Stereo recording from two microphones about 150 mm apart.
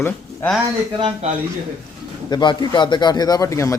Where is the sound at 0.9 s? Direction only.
35° right (ahead or behind).